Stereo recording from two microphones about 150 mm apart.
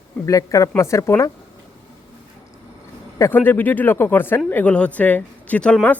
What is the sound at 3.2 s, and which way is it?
Speech, 15° left (ahead or behind).